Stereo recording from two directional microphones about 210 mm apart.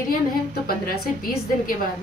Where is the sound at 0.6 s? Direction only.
45° left (ahead or behind).